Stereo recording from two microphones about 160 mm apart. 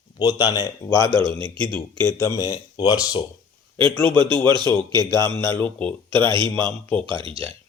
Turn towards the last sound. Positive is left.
turn(degrees=-35)  # may be behind; listen again after turning